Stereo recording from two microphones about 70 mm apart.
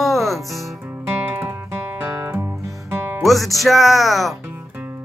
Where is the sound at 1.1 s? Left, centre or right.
Right.